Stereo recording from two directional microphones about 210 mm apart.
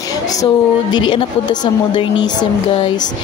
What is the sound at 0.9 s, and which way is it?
Speech, 20° left (ahead or behind).